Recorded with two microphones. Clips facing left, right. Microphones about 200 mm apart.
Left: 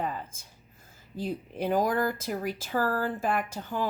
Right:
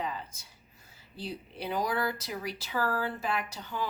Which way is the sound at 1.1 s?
45° left (ahead or behind).